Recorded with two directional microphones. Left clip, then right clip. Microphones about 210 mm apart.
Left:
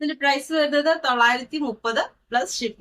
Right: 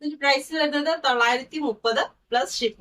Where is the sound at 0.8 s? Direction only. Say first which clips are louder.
Even; 15° left (ahead or behind).